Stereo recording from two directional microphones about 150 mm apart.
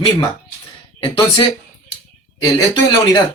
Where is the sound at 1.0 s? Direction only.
35° left (ahead or behind).